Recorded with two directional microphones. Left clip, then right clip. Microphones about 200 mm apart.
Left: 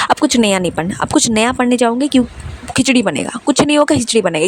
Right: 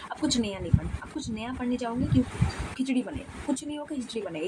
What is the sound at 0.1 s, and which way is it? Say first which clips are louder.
Speech: left 17 dB; 55° left (ahead or behind).